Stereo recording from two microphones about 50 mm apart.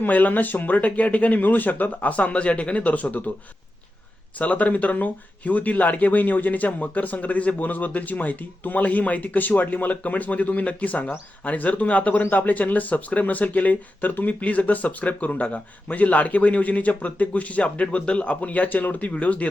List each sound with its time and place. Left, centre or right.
0.0 s speech: left
4.4 s speech: left